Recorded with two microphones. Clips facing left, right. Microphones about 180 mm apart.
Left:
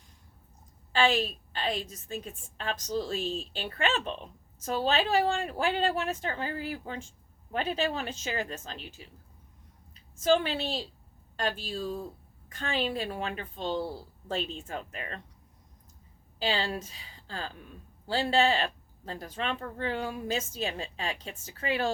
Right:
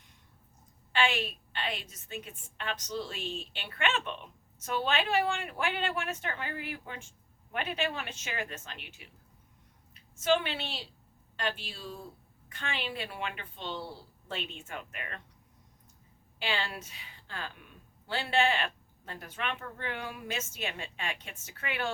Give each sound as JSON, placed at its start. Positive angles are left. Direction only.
{"t": 0.9, "sound": "a woman's voice", "side_deg": 40}
{"t": 16.4, "sound": "a woman's voice", "side_deg": 35}